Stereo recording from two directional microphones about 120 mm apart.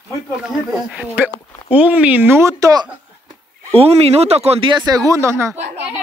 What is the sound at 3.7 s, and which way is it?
Speech, 55° right (ahead or behind).